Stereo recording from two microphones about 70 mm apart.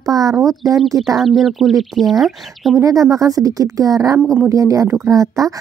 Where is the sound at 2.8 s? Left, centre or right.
Right.